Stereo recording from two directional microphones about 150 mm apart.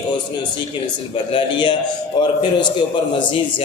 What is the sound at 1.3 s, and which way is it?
Speech, 35° left (ahead or behind).